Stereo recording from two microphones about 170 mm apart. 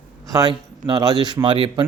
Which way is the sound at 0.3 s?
25° right (ahead or behind).